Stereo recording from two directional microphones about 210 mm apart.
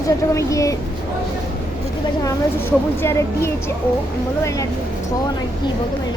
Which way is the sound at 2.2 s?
10° left (ahead or behind).